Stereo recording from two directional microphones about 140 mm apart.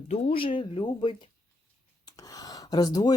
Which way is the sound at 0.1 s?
45° left (ahead or behind).